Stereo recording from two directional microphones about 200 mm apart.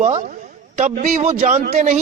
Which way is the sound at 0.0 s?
35° right (ahead or behind).